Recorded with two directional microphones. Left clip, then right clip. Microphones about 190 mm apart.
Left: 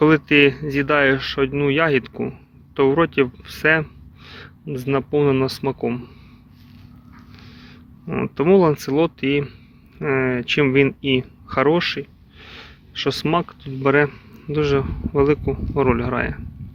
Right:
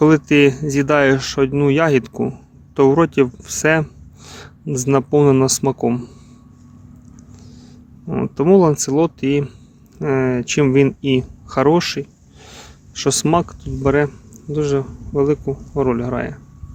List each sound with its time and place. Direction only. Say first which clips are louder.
0.0 s speech: right 2 dB; 30° right (ahead or behind)
7.5 s speech: even; 20° right (ahead or behind)
13.8 s a man's voice: even; 15° right (ahead or behind)